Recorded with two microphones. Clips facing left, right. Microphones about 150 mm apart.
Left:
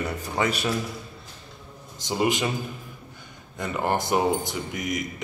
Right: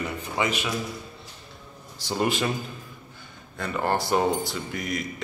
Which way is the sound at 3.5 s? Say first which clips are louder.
Even; 15° left (ahead or behind).